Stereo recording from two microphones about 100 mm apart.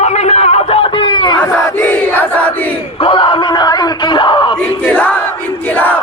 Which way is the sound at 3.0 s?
55° left (ahead or behind).